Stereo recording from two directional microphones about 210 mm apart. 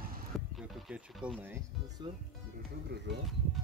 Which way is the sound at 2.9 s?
55° right (ahead or behind).